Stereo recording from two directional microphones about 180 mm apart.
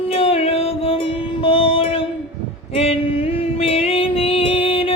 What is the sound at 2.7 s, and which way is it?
Music, 35° left (ahead or behind).